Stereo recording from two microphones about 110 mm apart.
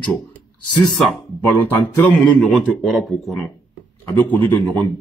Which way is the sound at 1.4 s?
15° left (ahead or behind).